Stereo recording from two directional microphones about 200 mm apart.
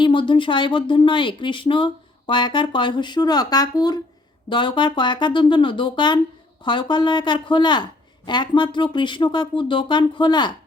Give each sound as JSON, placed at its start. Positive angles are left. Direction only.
{"t": 0.0, "sound": "speech", "side_deg": 25}